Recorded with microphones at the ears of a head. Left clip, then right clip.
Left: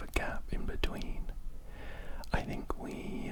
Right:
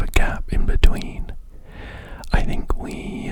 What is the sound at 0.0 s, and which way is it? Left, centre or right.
Whispering, right.